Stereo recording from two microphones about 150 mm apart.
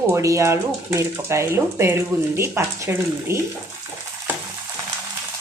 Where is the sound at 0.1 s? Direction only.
20° right (ahead or behind).